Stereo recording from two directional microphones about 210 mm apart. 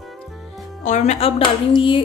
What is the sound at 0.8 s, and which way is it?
A woman's voice, 35° left (ahead or behind).